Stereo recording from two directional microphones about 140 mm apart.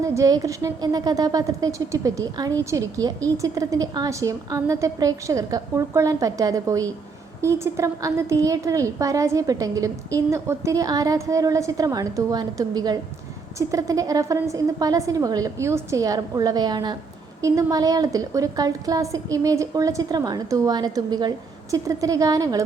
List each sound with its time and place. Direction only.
0.0 s a woman's voice: 25° right (ahead or behind)